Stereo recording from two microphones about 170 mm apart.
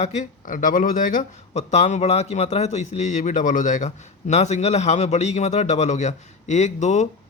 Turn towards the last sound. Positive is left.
turn(degrees=45)  # may be behind; listen again after turning